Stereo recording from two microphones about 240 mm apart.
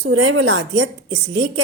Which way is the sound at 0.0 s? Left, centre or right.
Right.